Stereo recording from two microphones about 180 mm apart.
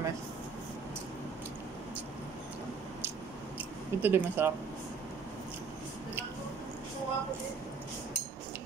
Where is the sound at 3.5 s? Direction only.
10° right (ahead or behind).